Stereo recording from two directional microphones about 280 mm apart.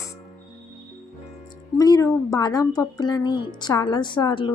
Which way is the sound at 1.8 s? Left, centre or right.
Centre.